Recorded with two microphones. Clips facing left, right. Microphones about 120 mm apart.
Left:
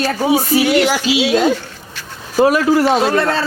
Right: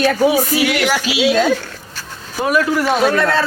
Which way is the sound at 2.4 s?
35° left (ahead or behind).